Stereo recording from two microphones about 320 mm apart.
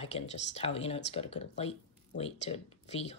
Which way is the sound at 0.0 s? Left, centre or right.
Centre.